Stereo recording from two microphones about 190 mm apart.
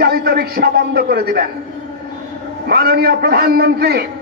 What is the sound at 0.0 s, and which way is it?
A man's voice, 55° right (ahead or behind).